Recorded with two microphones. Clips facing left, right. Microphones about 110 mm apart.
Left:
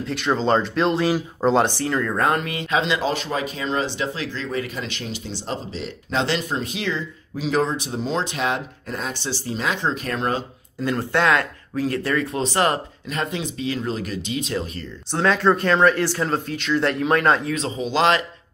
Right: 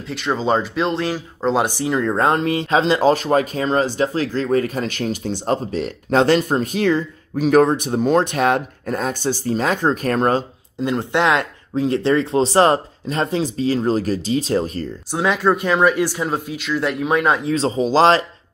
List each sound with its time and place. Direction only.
0.0 s speech: centre (ahead or behind)
1.6 s speech: 15° right (ahead or behind); by 10.4 s 45° right (ahead or behind)
10.8 s speech: 20° right (ahead or behind); by 14.9 s 40° right (ahead or behind)
15.0 s speech: 10° right (ahead or behind)
17.5 s speech: 30° right (ahead or behind)